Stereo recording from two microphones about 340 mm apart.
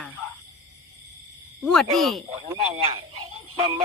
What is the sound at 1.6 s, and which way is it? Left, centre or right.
Speech, centre.